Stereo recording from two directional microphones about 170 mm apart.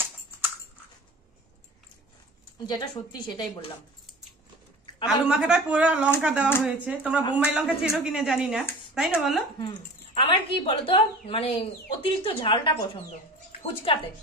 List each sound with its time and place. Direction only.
2.6 s a woman's voice: 25° left (ahead or behind)
5.0 s speech: 5° right (ahead or behind)
9.6 s a woman's voice: 30° left (ahead or behind)